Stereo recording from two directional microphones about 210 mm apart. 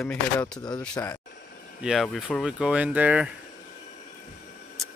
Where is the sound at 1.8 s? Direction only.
Centre (ahead or behind).